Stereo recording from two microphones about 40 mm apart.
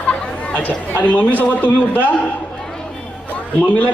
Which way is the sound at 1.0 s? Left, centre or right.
Left.